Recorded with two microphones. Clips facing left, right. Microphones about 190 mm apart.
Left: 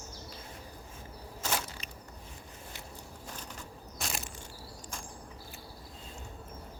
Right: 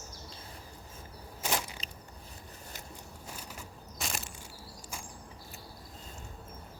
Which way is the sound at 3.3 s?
10° right (ahead or behind).